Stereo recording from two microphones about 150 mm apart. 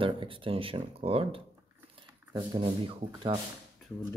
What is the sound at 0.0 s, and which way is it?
Speech, 35° right (ahead or behind).